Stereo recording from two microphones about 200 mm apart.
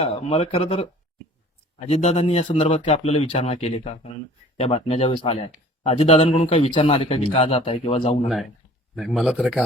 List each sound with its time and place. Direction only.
0.0 s a man's voice: 30° left (ahead or behind)
8.3 s a man's voice: centre (ahead or behind)